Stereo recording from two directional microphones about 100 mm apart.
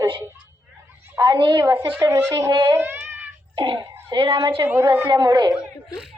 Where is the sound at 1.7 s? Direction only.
20° right (ahead or behind).